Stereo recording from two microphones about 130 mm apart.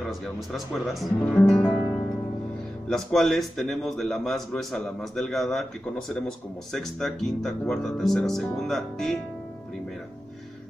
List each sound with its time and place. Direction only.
0.0 s a man's voice: centre (ahead or behind)
1.2 s music: 10° left (ahead or behind)
2.9 s a man's voice: 5° left (ahead or behind)